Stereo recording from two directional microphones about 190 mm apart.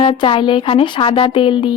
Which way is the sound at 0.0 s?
30° left (ahead or behind).